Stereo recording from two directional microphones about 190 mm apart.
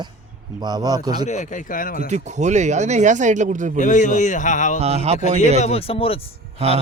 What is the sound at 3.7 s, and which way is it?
A man's voice, 40° left (ahead or behind).